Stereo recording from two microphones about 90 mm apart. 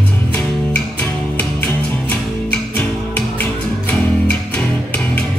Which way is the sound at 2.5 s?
15° left (ahead or behind).